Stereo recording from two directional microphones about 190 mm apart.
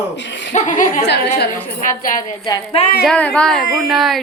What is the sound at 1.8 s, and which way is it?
Speech, 45° left (ahead or behind).